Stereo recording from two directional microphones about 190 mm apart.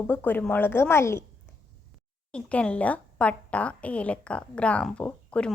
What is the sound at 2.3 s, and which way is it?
A woman's voice, 5° left (ahead or behind).